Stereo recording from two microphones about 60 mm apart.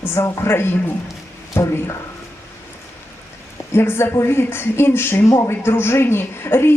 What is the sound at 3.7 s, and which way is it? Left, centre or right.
A woman's voice, left.